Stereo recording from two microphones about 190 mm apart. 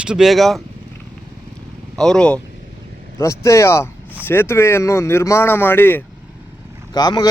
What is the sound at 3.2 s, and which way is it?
Speech, 15° left (ahead or behind).